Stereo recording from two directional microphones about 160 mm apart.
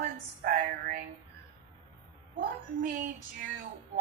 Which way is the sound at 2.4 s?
60° right (ahead or behind).